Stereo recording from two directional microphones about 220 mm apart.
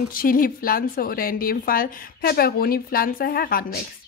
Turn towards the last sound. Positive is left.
turn(degrees=40)  # may be behind; listen again after turning